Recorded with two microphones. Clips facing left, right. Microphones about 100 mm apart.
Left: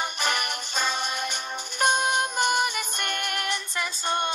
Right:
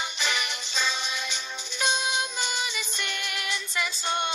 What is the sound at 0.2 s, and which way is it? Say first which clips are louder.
Music: left 1 dB; 50° left (ahead or behind).